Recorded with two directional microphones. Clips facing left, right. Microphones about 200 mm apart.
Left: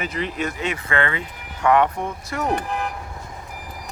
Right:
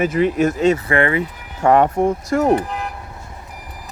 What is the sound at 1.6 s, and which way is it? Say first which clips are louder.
Speech: right 5 dB; 40° right (ahead or behind).